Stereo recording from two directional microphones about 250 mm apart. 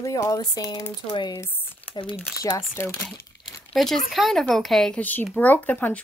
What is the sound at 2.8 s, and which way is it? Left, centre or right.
A child's voice, centre.